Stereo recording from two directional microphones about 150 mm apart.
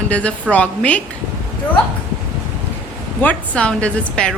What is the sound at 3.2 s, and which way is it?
A woman's voice, 10° left (ahead or behind).